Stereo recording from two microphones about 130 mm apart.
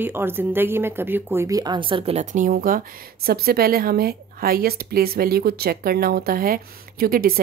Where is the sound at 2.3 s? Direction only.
90° right.